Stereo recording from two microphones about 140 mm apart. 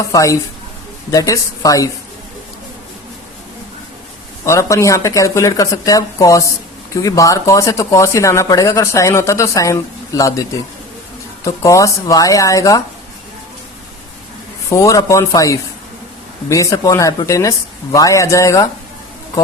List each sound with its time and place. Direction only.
0.1 s speech: 25° left (ahead or behind)
4.4 s speech: 20° left (ahead or behind)
11.4 s speech: 20° left (ahead or behind)
14.7 s speech: 20° left (ahead or behind)